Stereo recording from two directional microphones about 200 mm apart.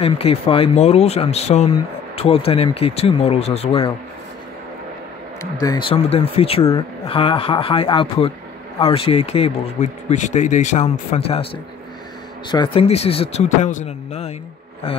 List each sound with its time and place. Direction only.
0.0 s speech: 30° left (ahead or behind)
5.4 s speech: 20° left (ahead or behind)
12.4 s speech: 25° left (ahead or behind)